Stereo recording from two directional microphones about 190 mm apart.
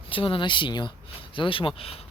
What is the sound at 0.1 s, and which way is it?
Speech, 25° left (ahead or behind).